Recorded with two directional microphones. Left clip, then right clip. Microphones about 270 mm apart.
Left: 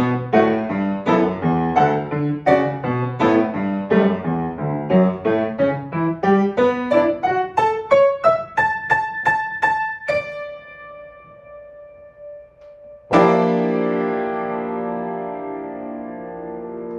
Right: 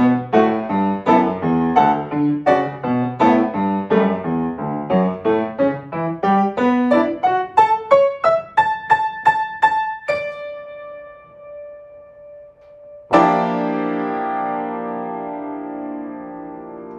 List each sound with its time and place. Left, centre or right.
0.0 s music: centre
6.5 s music: centre
13.1 s music: centre